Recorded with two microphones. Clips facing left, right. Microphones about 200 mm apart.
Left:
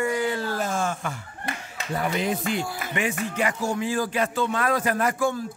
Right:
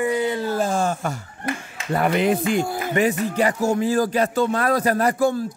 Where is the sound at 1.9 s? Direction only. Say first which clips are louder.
Right 7 dB; 65° right (ahead or behind).